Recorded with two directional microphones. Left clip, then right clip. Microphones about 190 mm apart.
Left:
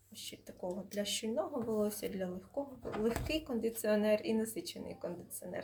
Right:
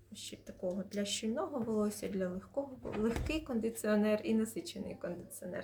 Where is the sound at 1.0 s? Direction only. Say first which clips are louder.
Left 1 dB; 10° right (ahead or behind).